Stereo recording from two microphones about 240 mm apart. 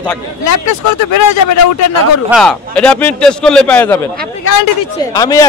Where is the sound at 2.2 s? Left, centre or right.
Centre.